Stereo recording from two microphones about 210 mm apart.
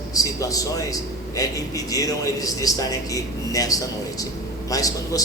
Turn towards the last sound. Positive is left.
turn(degrees=15)  # may be behind; listen again after turning